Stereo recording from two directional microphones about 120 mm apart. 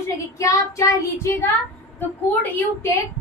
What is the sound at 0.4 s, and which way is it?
A woman's voice, 25° left (ahead or behind).